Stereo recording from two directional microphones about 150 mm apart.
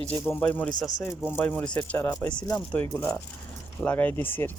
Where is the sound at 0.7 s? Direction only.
25° left (ahead or behind).